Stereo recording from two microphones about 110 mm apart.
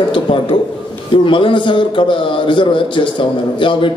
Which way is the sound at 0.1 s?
50° left (ahead or behind).